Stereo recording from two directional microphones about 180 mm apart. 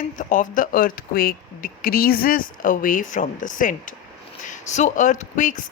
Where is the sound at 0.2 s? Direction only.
45° left (ahead or behind).